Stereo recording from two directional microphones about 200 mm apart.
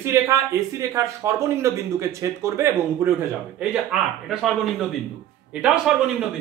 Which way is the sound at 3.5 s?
Centre (ahead or behind).